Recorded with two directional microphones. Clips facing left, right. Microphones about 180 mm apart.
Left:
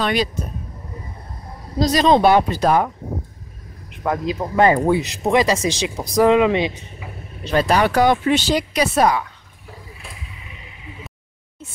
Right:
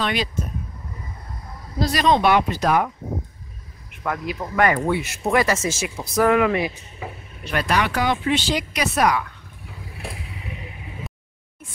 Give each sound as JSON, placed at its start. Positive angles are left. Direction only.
{"t": 0.0, "sound": "speech", "side_deg": 40}
{"t": 1.8, "sound": "speech", "side_deg": 20}
{"t": 2.0, "sound": "speech", "side_deg": 35}
{"t": 4.0, "sound": "speech", "side_deg": 25}
{"t": 7.0, "sound": "speech", "side_deg": -45}
{"t": 7.4, "sound": "speech", "side_deg": 30}
{"t": 9.9, "sound": "vehicle", "side_deg": -65}